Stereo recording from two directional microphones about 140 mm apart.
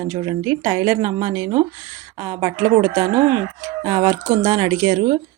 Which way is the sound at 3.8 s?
40° right (ahead or behind).